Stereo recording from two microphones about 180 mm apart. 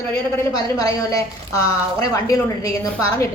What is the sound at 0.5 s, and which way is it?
A woman's voice, 20° left (ahead or behind).